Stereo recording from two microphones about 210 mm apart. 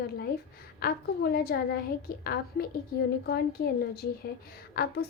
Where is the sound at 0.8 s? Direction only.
45° left (ahead or behind).